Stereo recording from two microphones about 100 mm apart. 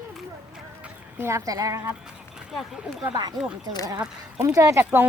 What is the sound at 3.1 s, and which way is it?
Speech, 45° right (ahead or behind).